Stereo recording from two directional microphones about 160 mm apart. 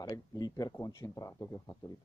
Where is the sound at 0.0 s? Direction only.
25° left (ahead or behind).